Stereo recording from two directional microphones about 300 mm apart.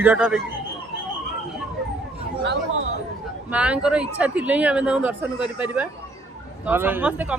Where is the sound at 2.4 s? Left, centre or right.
Right.